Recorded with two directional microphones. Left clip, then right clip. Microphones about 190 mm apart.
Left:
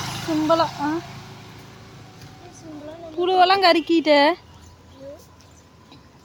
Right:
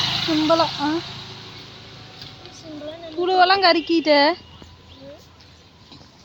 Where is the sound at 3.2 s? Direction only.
Centre (ahead or behind).